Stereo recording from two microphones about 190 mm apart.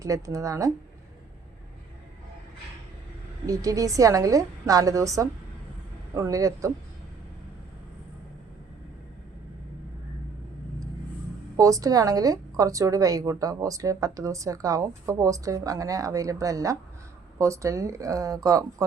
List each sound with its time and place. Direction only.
0.0 s speech: 15° right (ahead or behind)
3.4 s speech: 20° right (ahead or behind)
11.5 s speech: 20° right (ahead or behind)